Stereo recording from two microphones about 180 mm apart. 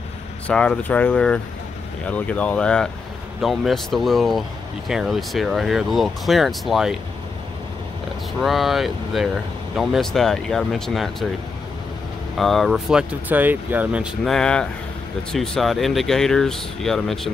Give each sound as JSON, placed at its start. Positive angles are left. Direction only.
{"t": 0.5, "sound": "speech", "side_deg": 5}
{"t": 8.4, "sound": "speech", "side_deg": 0}
{"t": 12.4, "sound": "speech", "side_deg": 0}
{"t": 14.2, "sound": "speech", "side_deg": 5}